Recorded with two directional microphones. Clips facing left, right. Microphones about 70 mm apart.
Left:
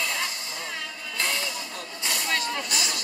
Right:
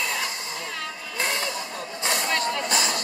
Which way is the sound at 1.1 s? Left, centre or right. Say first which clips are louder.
Right 2 dB; right.